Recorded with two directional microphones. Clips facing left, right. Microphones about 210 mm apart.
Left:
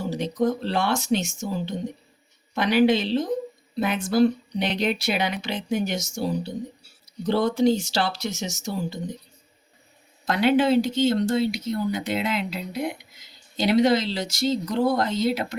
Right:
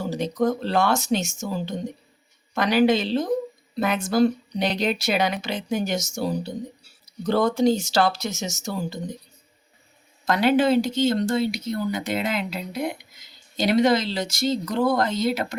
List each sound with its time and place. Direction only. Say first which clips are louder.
0.0 s speech: right 1 dB; 45° right (ahead or behind)
10.2 s speech: right 1 dB; 45° right (ahead or behind)